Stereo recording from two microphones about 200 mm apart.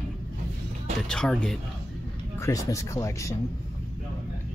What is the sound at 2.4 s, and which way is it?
Speech, 15° left (ahead or behind).